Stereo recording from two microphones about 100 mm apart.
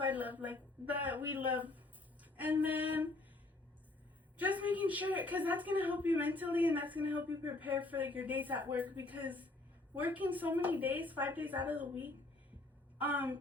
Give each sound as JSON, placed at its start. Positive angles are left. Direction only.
{"t": 0.0, "sound": "a woman's voice", "side_deg": -15}
{"t": 4.4, "sound": "a woman's voice", "side_deg": -15}